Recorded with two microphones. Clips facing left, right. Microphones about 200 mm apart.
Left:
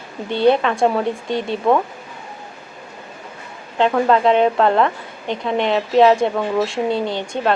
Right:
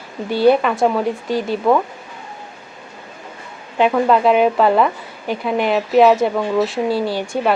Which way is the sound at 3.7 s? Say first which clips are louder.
Right 1 dB; 5° right (ahead or behind).